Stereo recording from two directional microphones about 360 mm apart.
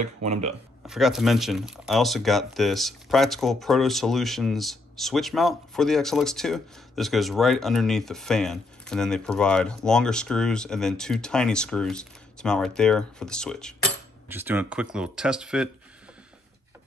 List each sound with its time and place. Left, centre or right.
0.0 s speech: centre
0.8 s speech: centre